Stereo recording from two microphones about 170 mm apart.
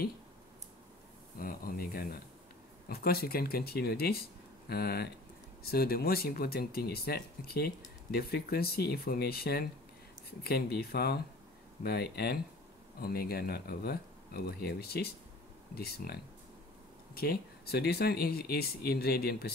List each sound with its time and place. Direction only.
1.4 s speech: 55° left (ahead or behind)